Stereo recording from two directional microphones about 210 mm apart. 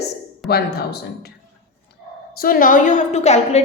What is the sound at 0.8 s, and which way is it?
Speech, 50° left (ahead or behind).